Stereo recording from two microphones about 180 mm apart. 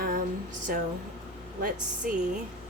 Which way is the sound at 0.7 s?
50° right (ahead or behind).